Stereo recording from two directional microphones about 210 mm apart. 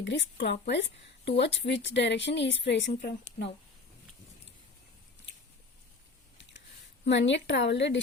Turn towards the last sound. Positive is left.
turn(degrees=55)  # may be behind; listen again after turning